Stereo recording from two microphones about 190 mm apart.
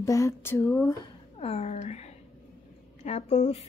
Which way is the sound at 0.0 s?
15° left (ahead or behind).